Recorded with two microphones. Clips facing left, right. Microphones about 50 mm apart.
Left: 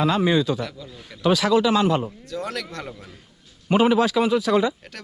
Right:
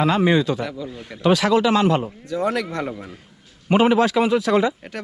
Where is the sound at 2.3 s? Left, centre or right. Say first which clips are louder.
Right 9 dB; centre.